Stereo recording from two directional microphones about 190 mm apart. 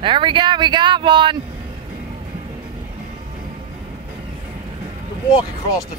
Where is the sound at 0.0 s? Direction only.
25° right (ahead or behind).